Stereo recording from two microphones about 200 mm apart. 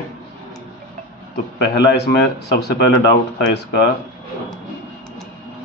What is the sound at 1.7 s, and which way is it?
Speech, 55° left (ahead or behind).